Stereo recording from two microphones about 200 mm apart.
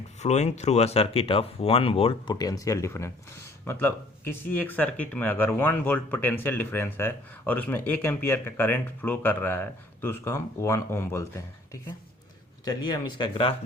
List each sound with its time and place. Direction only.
0.2 s speech: 35° left (ahead or behind)
2.3 s speech: 20° left (ahead or behind)